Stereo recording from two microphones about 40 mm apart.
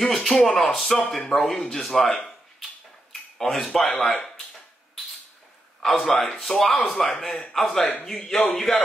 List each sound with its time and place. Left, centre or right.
0.0 s speech: centre
3.1 s a sound: centre
3.9 s speech: centre
5.9 s speech: centre